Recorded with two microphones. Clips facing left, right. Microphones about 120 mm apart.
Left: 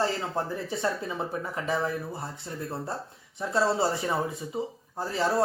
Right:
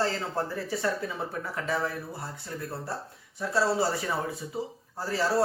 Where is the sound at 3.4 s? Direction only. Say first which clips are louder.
Left 1 dB; 20° left (ahead or behind).